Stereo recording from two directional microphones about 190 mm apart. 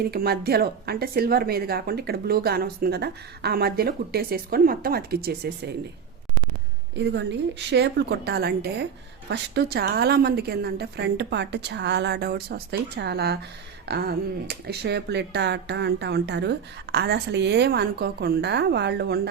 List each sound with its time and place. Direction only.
0.1 s speech: 55° right (ahead or behind)
7.0 s speech: 60° right (ahead or behind)